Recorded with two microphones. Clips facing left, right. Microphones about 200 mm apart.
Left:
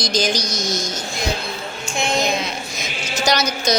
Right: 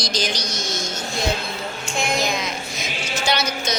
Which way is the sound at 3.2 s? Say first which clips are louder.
Left 4 dB; 40° left (ahead or behind).